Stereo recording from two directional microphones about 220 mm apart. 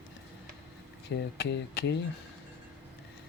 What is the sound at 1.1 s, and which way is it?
Speech, 50° left (ahead or behind).